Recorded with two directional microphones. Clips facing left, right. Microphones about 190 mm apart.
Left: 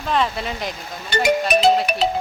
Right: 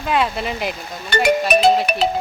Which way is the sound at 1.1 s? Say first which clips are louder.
Right 2 dB; 55° right (ahead or behind).